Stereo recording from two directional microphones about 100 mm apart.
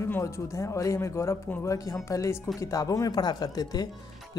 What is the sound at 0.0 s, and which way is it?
Speech, 30° left (ahead or behind).